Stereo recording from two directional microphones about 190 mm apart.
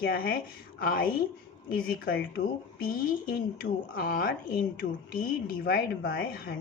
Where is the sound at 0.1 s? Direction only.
50° left (ahead or behind).